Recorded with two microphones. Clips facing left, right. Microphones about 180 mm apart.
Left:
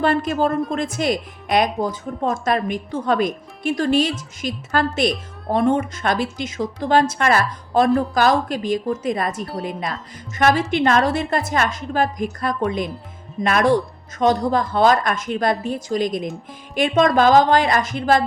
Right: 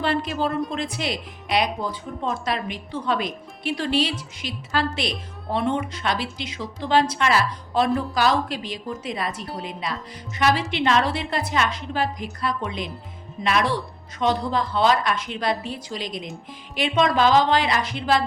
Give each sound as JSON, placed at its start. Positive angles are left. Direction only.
{"t": 0.0, "sound": "a woman's voice", "side_deg": 45}